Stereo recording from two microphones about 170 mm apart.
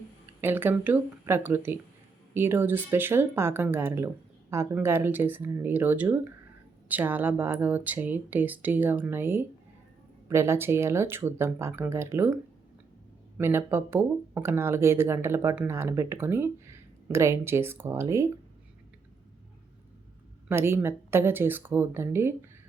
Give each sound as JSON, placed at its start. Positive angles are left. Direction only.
{"t": 0.4, "sound": "speech", "side_deg": -10}
{"t": 13.3, "sound": "speech", "side_deg": -15}
{"t": 20.5, "sound": "speech", "side_deg": -15}